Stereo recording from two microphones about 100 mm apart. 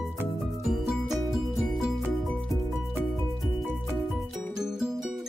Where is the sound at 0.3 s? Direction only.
Centre (ahead or behind).